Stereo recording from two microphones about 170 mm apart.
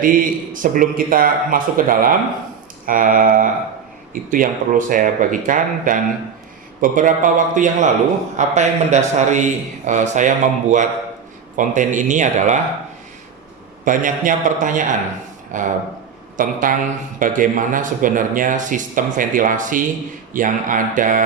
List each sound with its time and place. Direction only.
0.0 s a man's voice: 55° right (ahead or behind)
13.8 s a man's voice: 50° right (ahead or behind)